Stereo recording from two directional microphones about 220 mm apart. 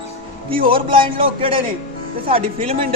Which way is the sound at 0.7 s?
25° right (ahead or behind).